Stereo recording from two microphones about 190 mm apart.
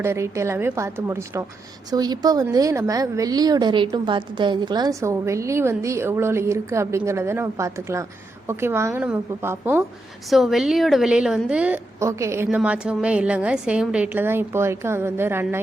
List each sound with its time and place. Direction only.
0.0 s a woman's voice: 15° right (ahead or behind)
10.2 s a woman's voice: centre (ahead or behind)